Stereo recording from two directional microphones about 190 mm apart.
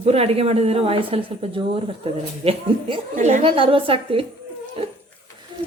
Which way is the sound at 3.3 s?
40° right (ahead or behind).